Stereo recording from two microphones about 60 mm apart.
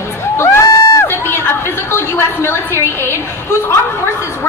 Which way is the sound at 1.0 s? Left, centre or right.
Left.